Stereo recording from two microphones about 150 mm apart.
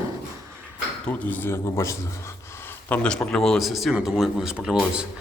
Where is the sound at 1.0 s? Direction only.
10° left (ahead or behind).